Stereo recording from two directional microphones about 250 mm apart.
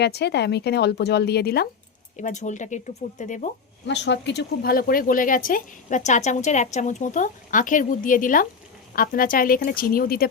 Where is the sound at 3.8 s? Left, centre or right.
Left.